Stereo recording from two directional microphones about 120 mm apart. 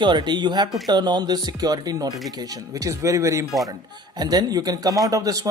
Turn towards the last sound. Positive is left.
turn(degrees=-30)  # may be behind; listen again after turning